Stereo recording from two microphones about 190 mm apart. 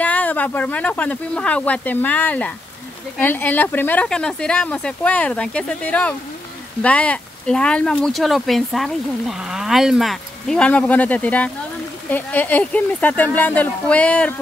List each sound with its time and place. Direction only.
0.0 s speech: 10° left (ahead or behind)